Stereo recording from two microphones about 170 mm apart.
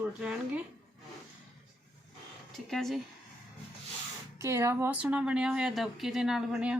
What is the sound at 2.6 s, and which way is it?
Speech, centre (ahead or behind).